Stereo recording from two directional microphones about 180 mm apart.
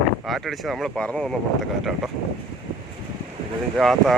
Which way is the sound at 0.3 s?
Centre (ahead or behind).